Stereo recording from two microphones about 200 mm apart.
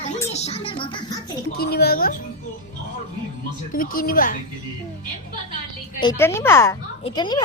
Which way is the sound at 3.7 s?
45° left (ahead or behind).